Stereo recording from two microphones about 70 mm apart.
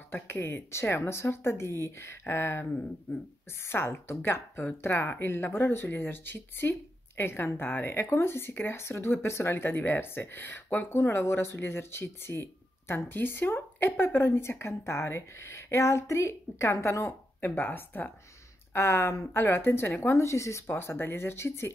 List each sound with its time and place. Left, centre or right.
0.1 s speech: left
2.6 s speech: centre
3.6 s speech: left
17.4 s speech: left